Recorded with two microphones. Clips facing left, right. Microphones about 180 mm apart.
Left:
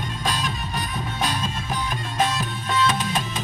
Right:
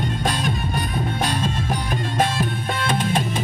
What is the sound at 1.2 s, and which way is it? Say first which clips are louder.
Music: right 1 dB; 55° right (ahead or behind).